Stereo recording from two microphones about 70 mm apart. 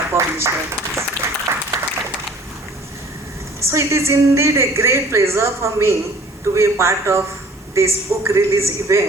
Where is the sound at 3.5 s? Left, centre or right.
Right.